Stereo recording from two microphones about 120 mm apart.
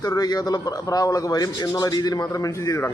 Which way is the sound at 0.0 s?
30° left (ahead or behind).